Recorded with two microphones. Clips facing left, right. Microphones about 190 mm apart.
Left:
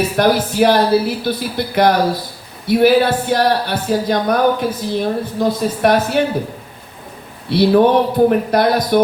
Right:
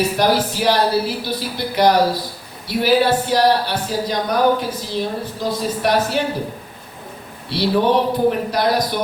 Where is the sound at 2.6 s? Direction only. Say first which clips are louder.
Left 4 dB; 55° left (ahead or behind).